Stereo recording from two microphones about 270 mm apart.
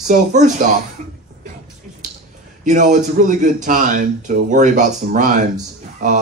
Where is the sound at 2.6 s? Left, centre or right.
Right.